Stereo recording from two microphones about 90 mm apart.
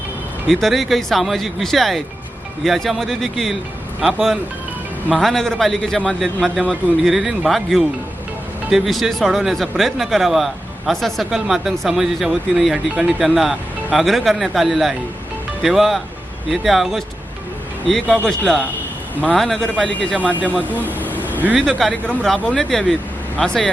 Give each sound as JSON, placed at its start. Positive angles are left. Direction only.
{"t": 0.5, "sound": "speech", "side_deg": 0}
{"t": 20.8, "sound": "vehicle", "side_deg": 20}
{"t": 21.2, "sound": "vehicle", "side_deg": -20}
{"t": 21.6, "sound": "speech", "side_deg": 5}